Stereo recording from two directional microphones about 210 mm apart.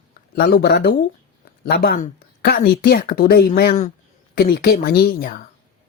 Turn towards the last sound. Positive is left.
turn(degrees=40)  # may be behind; listen again after turning